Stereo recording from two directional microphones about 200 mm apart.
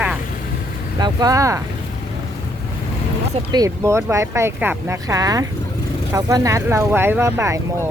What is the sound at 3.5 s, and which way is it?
Speech, 15° right (ahead or behind).